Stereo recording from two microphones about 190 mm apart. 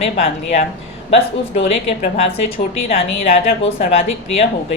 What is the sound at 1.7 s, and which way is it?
Speech, 30° left (ahead or behind).